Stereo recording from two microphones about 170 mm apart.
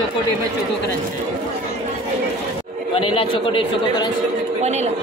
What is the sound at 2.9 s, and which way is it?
Speech, 35° left (ahead or behind).